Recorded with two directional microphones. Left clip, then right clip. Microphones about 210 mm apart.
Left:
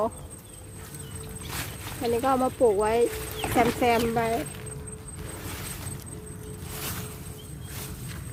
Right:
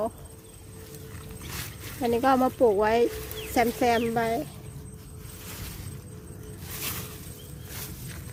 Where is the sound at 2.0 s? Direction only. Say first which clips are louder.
Right 2 dB; 30° right (ahead or behind).